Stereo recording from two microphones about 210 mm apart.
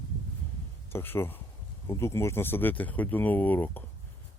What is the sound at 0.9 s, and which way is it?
Speech, 10° left (ahead or behind).